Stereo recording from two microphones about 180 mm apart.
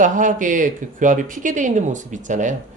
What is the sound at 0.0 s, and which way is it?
Speech, 45° right (ahead or behind).